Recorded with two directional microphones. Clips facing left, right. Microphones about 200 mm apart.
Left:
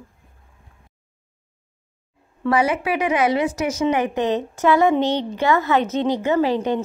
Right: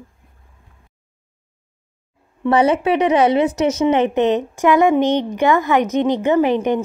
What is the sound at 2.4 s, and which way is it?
A woman's voice, 25° right (ahead or behind).